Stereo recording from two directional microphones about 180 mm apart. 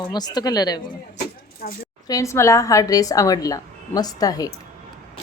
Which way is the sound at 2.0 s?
20° left (ahead or behind).